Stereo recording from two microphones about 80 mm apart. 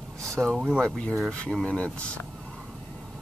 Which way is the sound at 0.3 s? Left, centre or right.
Centre.